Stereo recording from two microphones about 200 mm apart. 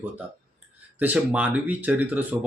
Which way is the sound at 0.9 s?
5° right (ahead or behind).